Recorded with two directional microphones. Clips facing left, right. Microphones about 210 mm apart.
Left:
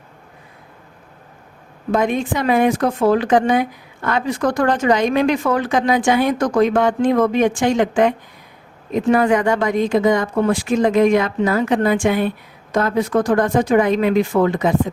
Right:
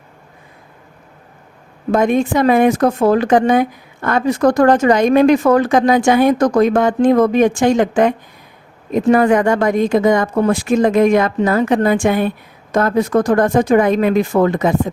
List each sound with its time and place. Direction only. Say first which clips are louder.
1.9 s speech: right 4 dB; 45° right (ahead or behind)